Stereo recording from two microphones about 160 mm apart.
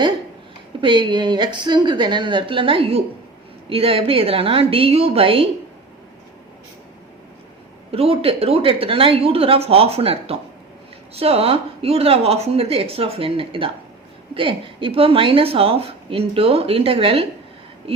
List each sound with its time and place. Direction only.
0.8 s a woman's voice: 30° right (ahead or behind)
7.9 s a woman's voice: 40° right (ahead or behind)